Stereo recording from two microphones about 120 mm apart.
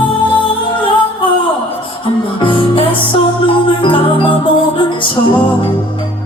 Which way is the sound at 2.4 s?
45° left (ahead or behind).